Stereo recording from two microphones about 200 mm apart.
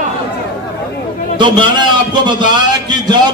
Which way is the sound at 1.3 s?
25° right (ahead or behind).